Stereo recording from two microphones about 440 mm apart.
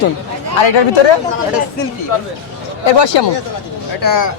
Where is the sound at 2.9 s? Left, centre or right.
Left.